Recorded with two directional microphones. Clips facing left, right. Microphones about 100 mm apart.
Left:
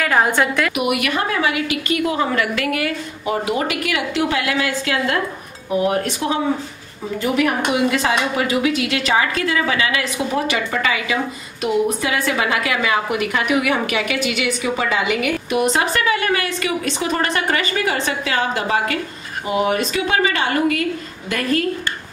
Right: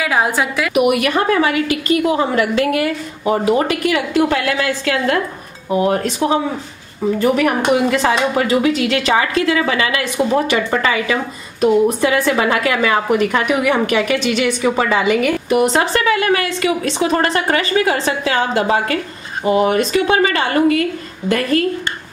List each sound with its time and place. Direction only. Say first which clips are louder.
0.0 s a woman's voice: even; 5° right (ahead or behind)
0.7 s a woman's voice: right 6 dB; 35° right (ahead or behind)
5.7 s a woman's voice: right 3 dB; 30° right (ahead or behind)
7.2 s a woman's voice: right 2 dB; 40° right (ahead or behind)
9.3 s a woman's voice: right 4 dB; 25° right (ahead or behind)
10.4 s a woman's voice: right 4 dB; 35° right (ahead or behind)